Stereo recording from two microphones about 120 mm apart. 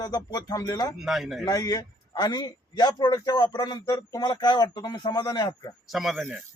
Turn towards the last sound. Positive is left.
turn(degrees=0)  # may be behind; listen again after turning